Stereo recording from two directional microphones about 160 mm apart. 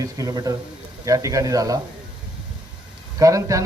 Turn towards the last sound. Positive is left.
turn(degrees=-20)  # may be behind; listen again after turning